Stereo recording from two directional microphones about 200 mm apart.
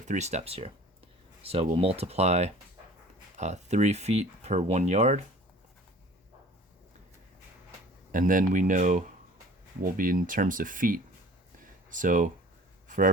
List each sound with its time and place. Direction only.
0.1 s speech: 35° right (ahead or behind)
8.1 s speech: 40° right (ahead or behind)